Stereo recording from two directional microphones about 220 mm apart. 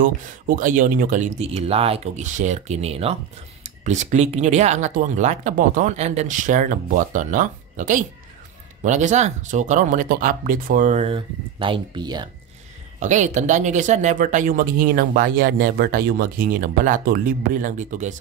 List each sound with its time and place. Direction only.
0.0 s speech: 35° right (ahead or behind); by 12.3 s 20° right (ahead or behind)
13.0 s speech: 35° right (ahead or behind)